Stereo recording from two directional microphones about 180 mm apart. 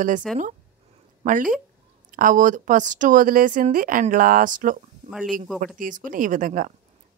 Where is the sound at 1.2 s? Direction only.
50° right (ahead or behind).